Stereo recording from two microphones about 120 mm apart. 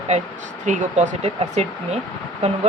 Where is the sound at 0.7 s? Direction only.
90° right; by 1.9 s 75° right (ahead or behind).